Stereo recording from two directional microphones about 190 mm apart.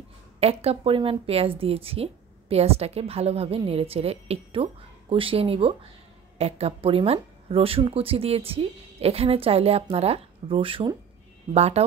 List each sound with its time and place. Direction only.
0.4 s speech: 30° right (ahead or behind)